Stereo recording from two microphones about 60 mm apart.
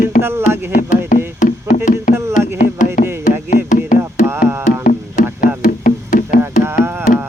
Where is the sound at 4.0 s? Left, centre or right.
Right.